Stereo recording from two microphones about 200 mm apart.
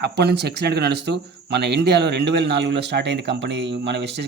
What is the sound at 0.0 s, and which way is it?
Speech, 55° right (ahead or behind).